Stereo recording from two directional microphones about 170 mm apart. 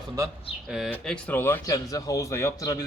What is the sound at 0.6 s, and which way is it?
A man's voice, centre (ahead or behind).